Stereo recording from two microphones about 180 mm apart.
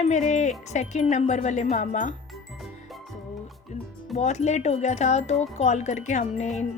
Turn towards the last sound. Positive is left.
turn(degrees=40)  # may be behind; listen again after turning